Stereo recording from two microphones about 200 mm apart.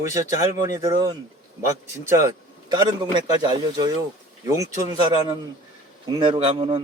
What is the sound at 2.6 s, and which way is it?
Speech, 20° right (ahead or behind).